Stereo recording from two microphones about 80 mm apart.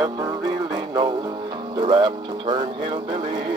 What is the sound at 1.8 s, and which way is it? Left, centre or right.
Music, right.